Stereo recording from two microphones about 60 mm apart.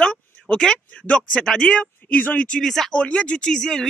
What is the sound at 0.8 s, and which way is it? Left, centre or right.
Speech, left.